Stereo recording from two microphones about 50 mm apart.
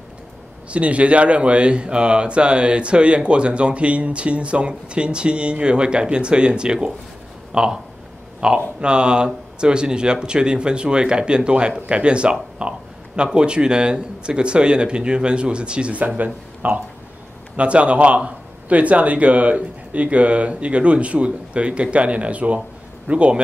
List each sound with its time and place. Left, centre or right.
0.7 s speech: right
16.6 s speech: right